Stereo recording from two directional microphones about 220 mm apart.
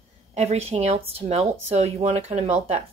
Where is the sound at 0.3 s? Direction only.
30° right (ahead or behind).